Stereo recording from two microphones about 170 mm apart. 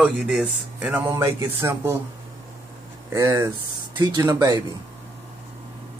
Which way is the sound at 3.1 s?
15° right (ahead or behind).